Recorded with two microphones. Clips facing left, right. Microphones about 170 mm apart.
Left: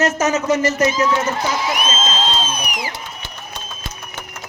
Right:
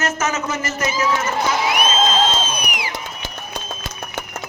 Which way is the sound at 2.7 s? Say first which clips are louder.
Left 1 dB; 40° left (ahead or behind).